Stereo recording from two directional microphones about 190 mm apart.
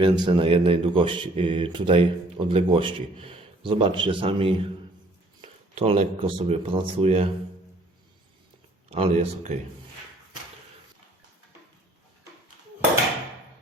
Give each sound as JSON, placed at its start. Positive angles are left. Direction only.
{"t": 0.0, "sound": "a man's voice", "side_deg": -25}
{"t": 8.9, "sound": "speech", "side_deg": -35}